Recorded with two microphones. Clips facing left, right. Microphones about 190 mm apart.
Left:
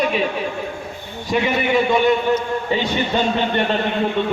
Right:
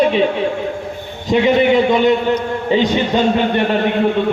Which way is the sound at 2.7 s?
15° right (ahead or behind).